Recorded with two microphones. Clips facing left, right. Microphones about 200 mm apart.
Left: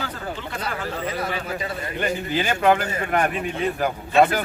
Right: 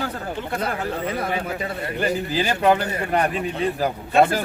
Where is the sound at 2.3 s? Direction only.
35° right (ahead or behind).